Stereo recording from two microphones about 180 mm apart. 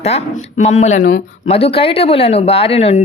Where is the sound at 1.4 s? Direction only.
35° left (ahead or behind).